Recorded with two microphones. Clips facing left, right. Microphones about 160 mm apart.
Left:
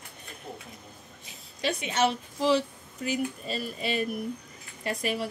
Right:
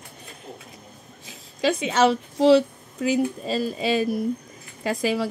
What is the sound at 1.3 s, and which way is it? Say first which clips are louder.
A woman's voice: right 8 dB; 90° right.